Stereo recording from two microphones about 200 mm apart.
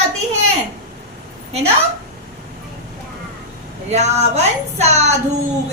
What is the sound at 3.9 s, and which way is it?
A child's voice, 35° right (ahead or behind).